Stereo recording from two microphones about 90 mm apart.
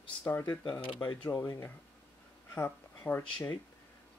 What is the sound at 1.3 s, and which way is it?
Speech, 30° left (ahead or behind).